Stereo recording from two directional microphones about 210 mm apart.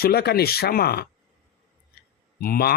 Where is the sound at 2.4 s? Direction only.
45° left (ahead or behind).